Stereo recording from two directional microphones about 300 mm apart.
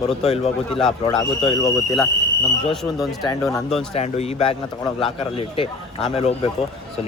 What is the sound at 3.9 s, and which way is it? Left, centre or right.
A man's voice, left.